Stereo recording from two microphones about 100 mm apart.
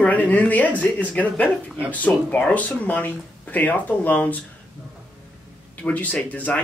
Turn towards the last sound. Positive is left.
turn(degrees=15)  # may be behind; listen again after turning